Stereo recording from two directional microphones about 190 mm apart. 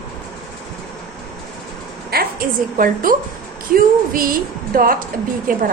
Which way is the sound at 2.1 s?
50° right (ahead or behind).